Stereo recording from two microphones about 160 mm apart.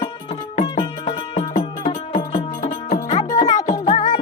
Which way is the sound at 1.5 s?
55° left (ahead or behind).